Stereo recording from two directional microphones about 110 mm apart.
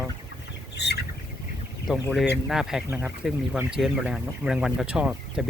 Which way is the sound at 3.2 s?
5° right (ahead or behind).